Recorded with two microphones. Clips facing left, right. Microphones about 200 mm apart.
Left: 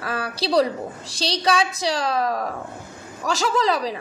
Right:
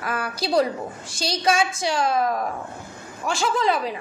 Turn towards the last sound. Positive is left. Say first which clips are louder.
# left 1 dB
turn(degrees=35)  # may be behind; listen again after turning